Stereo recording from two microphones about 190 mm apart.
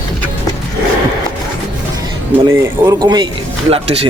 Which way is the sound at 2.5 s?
15° right (ahead or behind).